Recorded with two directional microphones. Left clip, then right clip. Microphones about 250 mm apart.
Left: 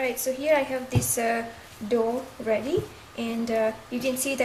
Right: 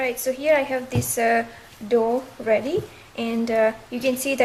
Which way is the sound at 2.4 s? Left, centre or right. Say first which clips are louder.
Right 4 dB; centre.